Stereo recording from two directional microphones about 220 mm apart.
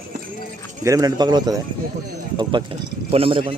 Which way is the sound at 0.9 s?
15° right (ahead or behind).